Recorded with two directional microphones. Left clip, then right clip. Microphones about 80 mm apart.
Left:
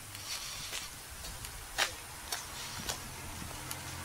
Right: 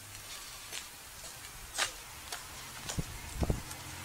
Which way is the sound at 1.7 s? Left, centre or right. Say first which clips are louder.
Left 2 dB; centre.